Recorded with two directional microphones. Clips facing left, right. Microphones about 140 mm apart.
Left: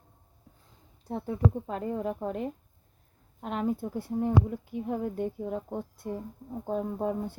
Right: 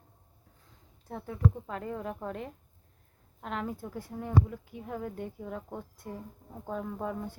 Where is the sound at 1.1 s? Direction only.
25° left (ahead or behind).